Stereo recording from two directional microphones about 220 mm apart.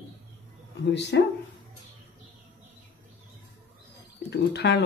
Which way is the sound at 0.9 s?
50° left (ahead or behind).